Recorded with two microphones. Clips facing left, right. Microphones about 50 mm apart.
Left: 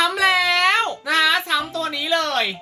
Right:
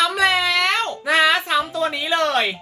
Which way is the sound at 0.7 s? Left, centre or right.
Left.